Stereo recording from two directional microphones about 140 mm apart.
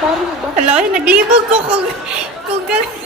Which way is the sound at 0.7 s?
10° right (ahead or behind).